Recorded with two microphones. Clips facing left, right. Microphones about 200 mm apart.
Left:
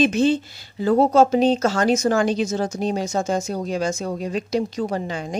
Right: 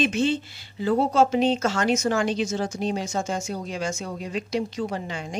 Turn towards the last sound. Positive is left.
turn(degrees=40)  # may be behind; listen again after turning